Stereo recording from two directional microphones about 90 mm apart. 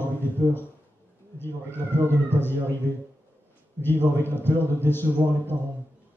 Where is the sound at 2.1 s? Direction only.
25° left (ahead or behind).